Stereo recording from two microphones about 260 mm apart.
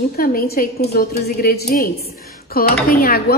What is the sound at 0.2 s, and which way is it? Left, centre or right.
A woman's voice, left.